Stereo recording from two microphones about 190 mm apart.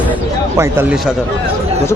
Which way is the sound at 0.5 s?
10° right (ahead or behind).